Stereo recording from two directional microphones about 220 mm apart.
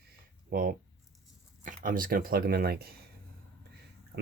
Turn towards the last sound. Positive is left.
turn(degrees=-50)  # may be behind; listen again after turning